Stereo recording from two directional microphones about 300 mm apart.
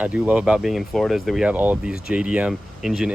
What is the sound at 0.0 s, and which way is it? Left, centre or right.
Speech, centre.